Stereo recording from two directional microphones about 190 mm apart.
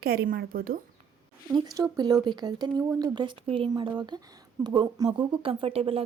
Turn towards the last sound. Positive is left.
turn(degrees=-30)  # may be behind; listen again after turning